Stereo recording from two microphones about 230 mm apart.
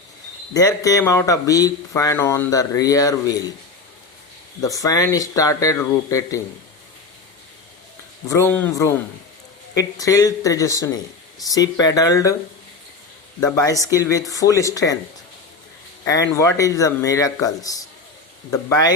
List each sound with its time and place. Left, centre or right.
0.5 s speech: centre
4.6 s speech: centre
8.3 s speech: centre
13.4 s speech: centre
16.0 s speech: centre